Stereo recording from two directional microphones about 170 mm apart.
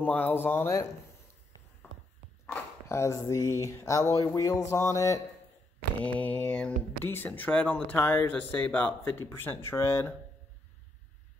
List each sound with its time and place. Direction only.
0.0 s speech: 10° left (ahead or behind)
2.4 s speech: 10° left (ahead or behind)